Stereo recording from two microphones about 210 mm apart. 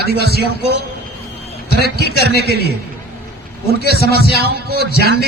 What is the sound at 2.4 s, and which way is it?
Speech, 50° right (ahead or behind).